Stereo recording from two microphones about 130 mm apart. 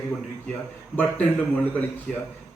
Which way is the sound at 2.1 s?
Centre (ahead or behind).